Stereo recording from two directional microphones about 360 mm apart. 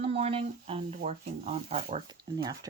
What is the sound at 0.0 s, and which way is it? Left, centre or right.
Speech, centre.